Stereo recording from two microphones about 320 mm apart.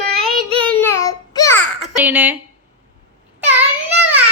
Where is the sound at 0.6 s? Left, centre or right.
Centre.